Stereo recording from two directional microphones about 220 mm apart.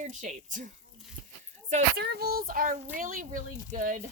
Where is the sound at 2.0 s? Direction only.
45° right (ahead or behind).